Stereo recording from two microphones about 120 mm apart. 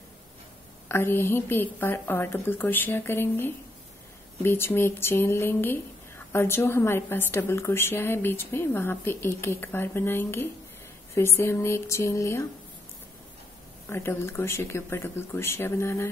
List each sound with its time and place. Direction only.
0.8 s a woman's voice: 20° left (ahead or behind)
13.8 s a woman's voice: 20° left (ahead or behind)